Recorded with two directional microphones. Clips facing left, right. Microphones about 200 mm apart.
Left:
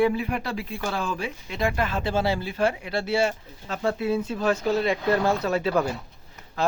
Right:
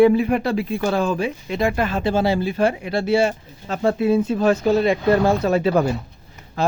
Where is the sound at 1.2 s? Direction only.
15° right (ahead or behind).